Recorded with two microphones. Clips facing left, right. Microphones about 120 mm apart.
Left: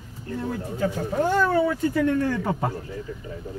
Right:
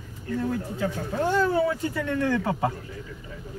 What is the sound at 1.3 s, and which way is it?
Speech, 55° left (ahead or behind).